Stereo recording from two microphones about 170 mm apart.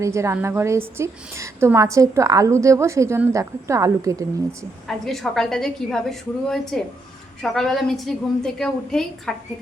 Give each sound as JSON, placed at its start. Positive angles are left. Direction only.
{"t": 0.0, "sound": "a woman's voice", "side_deg": -15}
{"t": 4.9, "sound": "a woman's voice", "side_deg": 0}